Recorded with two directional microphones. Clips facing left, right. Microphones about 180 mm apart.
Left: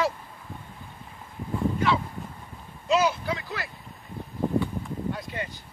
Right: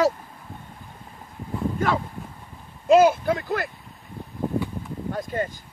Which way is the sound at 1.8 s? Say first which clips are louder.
Right 2 dB; 45° right (ahead or behind).